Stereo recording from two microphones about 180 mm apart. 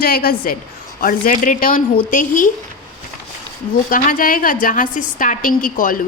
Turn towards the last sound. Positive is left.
turn(degrees=50)  # may be behind; listen again after turning